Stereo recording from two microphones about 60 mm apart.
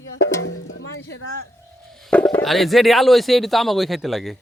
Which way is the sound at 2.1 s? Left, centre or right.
Left.